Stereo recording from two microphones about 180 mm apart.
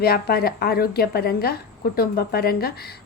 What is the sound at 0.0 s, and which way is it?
A woman's voice, 60° left (ahead or behind).